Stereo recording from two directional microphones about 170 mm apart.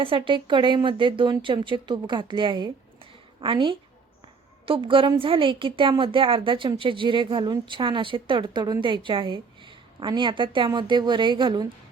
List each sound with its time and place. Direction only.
0.0 s a woman's voice: 30° right (ahead or behind)